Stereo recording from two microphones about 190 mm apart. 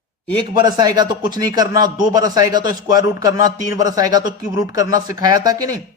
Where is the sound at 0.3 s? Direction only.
25° right (ahead or behind).